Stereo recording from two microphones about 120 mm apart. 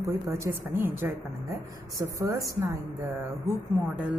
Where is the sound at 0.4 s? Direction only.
20° right (ahead or behind).